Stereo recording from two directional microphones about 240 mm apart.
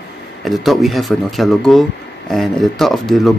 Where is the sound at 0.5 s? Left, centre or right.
Centre.